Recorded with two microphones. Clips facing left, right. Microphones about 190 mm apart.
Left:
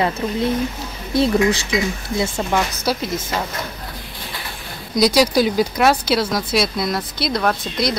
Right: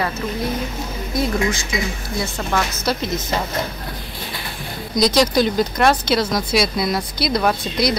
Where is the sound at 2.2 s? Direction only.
10° left (ahead or behind).